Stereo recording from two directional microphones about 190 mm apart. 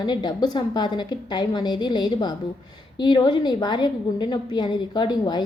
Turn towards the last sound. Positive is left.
turn(degrees=20)  # may be behind; listen again after turning